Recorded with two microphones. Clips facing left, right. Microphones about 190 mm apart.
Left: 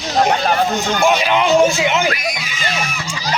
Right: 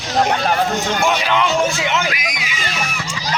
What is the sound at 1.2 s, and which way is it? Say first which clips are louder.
Speech: left 4 dB; 20° left (ahead or behind).